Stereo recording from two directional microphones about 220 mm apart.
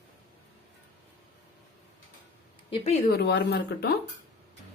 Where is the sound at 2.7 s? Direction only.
30° left (ahead or behind).